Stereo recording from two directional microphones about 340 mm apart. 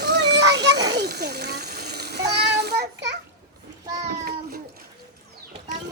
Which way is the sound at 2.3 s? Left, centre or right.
Right.